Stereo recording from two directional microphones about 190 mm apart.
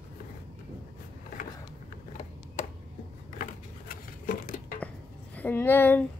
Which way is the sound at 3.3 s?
45° left (ahead or behind).